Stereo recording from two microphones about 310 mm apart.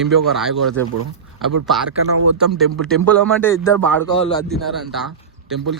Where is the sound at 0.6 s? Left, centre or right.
Right.